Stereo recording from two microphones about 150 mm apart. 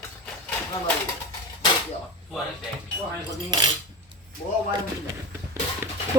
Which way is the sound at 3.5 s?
30° right (ahead or behind).